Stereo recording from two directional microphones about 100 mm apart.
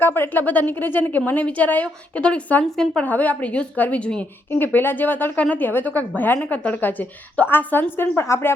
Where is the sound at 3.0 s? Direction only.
15° left (ahead or behind).